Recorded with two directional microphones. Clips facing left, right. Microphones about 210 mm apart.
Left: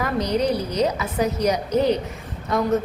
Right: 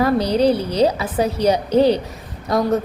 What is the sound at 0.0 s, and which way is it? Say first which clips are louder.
A woman's voice: right 6 dB; 30° right (ahead or behind).